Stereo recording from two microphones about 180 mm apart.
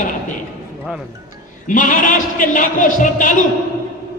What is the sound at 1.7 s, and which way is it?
Speech, 45° left (ahead or behind).